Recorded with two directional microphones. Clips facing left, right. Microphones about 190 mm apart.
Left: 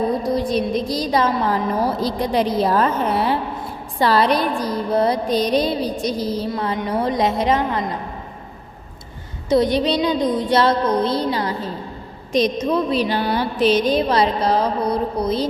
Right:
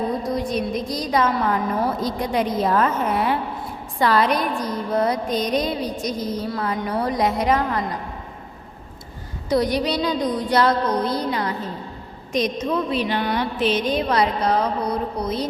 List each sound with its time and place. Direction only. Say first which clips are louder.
0.2 s a sound: left 4 dB; 35° left (ahead or behind)
0.6 s music: left 4 dB; 30° left (ahead or behind)
9.5 s music: left 4 dB; 25° left (ahead or behind)